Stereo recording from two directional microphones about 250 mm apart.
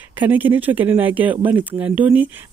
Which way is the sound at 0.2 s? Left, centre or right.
Centre.